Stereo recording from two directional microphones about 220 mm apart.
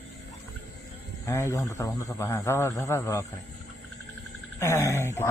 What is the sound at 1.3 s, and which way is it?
Speech, 15° left (ahead or behind).